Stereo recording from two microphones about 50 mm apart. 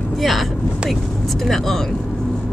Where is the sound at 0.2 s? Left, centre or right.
Centre.